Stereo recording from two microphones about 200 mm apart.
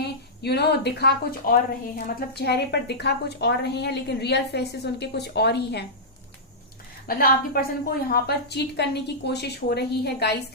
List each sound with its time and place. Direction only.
0.4 s a woman's voice: 55° left (ahead or behind)
7.1 s a woman's voice: 45° left (ahead or behind)